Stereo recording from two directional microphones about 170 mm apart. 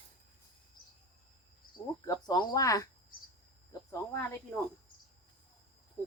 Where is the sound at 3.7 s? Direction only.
15° left (ahead or behind).